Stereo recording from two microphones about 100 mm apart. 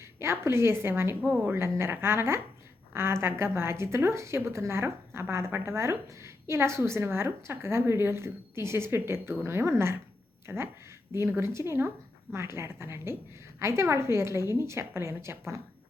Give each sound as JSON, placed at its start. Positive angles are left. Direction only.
{"t": 0.2, "sound": "a woman's voice", "side_deg": -25}
{"t": 1.2, "sound": "a woman's voice", "side_deg": -10}
{"t": 1.5, "sound": "a woman's voice", "side_deg": -25}